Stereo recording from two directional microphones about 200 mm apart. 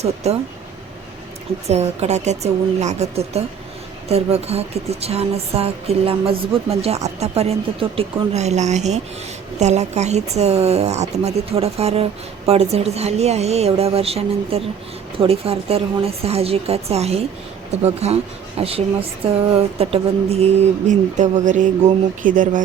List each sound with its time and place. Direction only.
0.0 s speech: 30° right (ahead or behind)
1.6 s a woman's voice: 35° right (ahead or behind)